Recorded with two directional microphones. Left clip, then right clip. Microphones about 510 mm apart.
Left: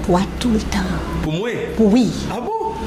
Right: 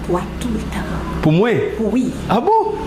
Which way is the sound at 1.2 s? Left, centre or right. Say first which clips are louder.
Right 10 dB; right.